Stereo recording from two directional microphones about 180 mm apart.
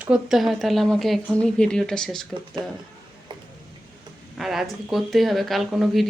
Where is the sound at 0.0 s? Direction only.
5° right (ahead or behind).